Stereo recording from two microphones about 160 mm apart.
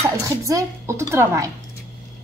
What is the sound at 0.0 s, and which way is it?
A woman's voice, 20° right (ahead or behind).